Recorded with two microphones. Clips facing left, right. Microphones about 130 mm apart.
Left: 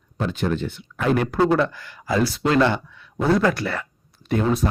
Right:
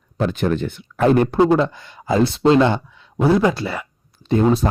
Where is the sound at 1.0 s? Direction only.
35° right (ahead or behind).